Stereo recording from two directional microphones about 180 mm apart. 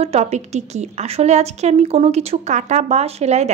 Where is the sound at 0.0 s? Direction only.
35° right (ahead or behind).